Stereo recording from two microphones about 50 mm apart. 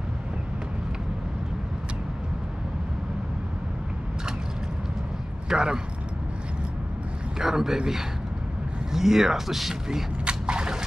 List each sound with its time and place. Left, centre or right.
5.5 s speech: centre
7.3 s speech: centre
10.2 s a sound: centre